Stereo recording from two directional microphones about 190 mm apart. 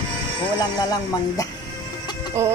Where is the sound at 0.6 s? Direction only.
20° left (ahead or behind).